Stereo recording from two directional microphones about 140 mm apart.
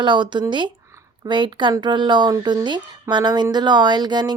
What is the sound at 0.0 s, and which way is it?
Speech, 35° right (ahead or behind).